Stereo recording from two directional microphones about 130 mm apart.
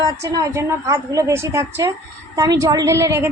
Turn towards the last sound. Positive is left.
turn(degrees=-20)  # may be behind; listen again after turning